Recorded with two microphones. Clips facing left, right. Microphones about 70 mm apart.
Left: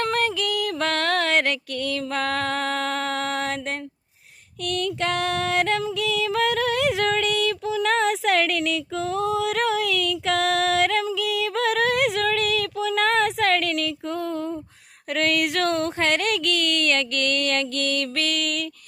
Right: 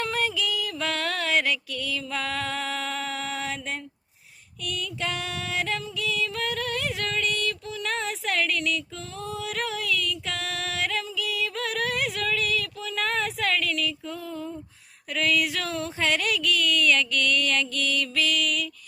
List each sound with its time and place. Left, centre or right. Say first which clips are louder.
0.0 s female singing: left 4 dB; left
4.6 s female singing: left 7 dB; left
15.1 s a sound: left 3 dB; left